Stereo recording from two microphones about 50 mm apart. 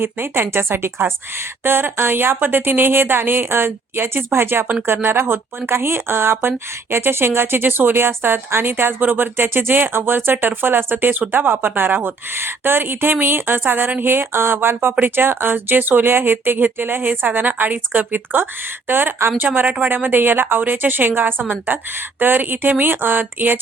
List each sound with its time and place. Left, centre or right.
0.0 s speech: right
8.7 s speech: right
12.3 s speech: right
19.6 s speech: right
19.9 s speech: right